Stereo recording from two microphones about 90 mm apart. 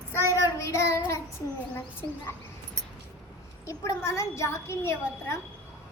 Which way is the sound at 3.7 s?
30° left (ahead or behind).